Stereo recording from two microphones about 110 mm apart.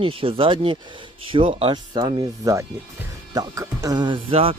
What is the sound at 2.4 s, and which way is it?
Speech, 30° right (ahead or behind).